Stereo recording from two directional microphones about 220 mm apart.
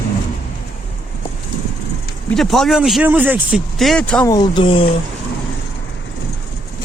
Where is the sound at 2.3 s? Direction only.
Centre (ahead or behind).